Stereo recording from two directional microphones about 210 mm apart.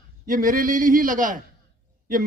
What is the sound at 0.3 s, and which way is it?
A man's voice, 40° right (ahead or behind).